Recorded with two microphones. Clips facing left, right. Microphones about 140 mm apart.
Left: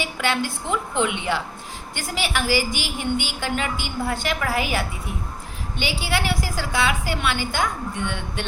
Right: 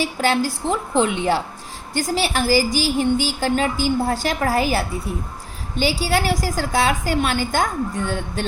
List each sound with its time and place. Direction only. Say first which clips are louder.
0.0 s a woman's voice: right 5 dB; 40° right (ahead or behind)